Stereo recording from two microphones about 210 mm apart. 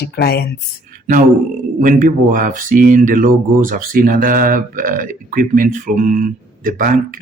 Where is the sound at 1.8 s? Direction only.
40° right (ahead or behind).